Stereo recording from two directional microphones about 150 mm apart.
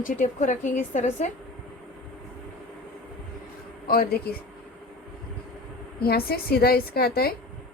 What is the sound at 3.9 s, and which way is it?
Speech, 85° left.